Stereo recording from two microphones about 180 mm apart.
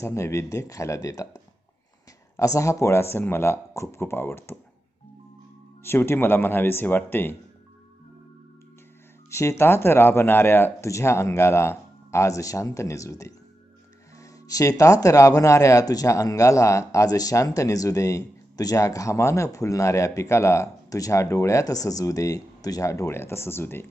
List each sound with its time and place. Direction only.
0.0 s speech: 15° left (ahead or behind)
5.8 s speech: 15° left (ahead or behind)
9.3 s speech: 15° left (ahead or behind)